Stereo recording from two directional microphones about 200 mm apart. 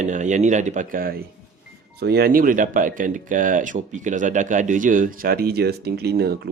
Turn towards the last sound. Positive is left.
turn(degrees=-55)  # may be behind; listen again after turning